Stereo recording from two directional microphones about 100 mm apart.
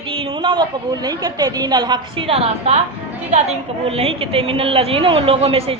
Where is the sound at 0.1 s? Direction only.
65° right (ahead or behind); by 2.0 s 40° right (ahead or behind).